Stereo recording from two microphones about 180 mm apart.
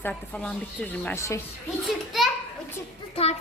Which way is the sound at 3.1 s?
35° left (ahead or behind).